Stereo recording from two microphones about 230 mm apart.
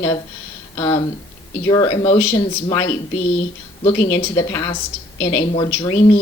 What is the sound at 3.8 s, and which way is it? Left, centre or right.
Speech, centre.